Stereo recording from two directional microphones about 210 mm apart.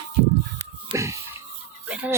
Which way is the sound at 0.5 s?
15° right (ahead or behind).